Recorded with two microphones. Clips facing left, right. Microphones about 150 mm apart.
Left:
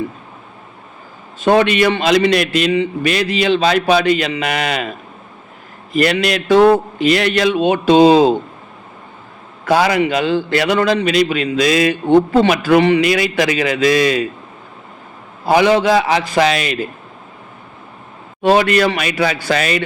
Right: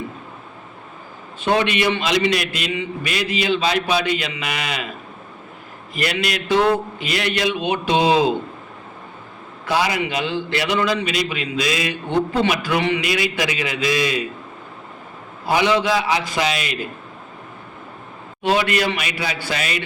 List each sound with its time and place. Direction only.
1.4 s a man's voice: 45° left (ahead or behind)
6.0 s a man's voice: 50° left (ahead or behind)
9.6 s a man's voice: 50° left (ahead or behind)
15.4 s a man's voice: 50° left (ahead or behind)
18.4 s a man's voice: 45° left (ahead or behind)